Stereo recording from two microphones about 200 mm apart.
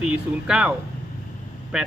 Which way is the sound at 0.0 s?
5° right (ahead or behind).